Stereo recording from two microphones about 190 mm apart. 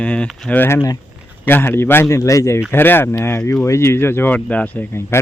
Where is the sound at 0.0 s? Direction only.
5° left (ahead or behind).